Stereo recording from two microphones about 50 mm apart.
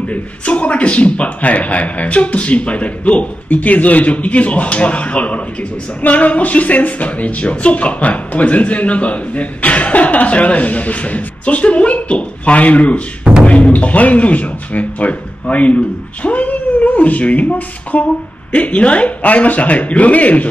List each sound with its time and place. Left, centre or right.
0.1 s a man's voice: left